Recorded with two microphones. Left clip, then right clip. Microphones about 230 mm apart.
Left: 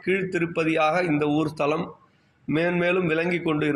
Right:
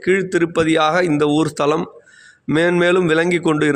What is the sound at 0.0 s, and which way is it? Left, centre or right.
A man's voice, right.